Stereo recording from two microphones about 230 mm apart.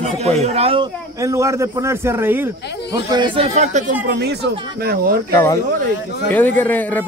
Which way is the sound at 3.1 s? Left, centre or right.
Right.